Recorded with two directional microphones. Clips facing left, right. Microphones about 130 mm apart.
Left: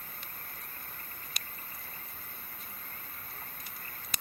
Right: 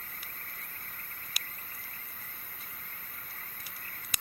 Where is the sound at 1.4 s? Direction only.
5° right (ahead or behind).